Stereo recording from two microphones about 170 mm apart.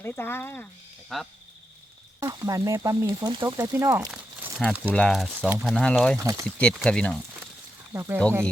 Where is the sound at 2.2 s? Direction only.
20° right (ahead or behind).